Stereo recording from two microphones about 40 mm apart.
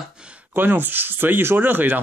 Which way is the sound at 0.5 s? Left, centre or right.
Right.